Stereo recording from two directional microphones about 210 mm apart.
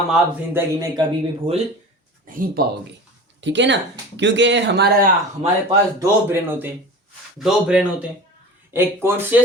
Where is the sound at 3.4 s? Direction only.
60° right (ahead or behind).